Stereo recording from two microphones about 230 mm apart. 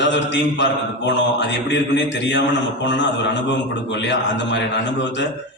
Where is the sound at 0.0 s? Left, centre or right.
Left.